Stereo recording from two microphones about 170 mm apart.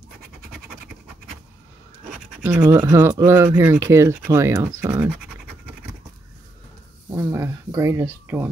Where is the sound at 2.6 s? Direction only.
15° right (ahead or behind).